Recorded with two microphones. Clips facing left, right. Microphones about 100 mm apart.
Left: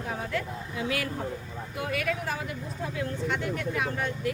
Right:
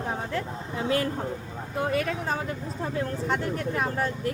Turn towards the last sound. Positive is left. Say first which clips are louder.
# right 2 dB
turn(degrees=-40)  # may be behind; listen again after turning